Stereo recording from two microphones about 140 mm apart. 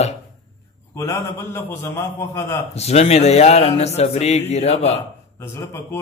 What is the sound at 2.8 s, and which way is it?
Speech, 50° left (ahead or behind).